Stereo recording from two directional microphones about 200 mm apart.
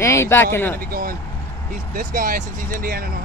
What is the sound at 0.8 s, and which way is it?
Speech, 45° right (ahead or behind).